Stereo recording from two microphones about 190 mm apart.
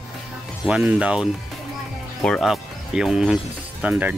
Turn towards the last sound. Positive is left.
turn(degrees=-10)  # may be behind; listen again after turning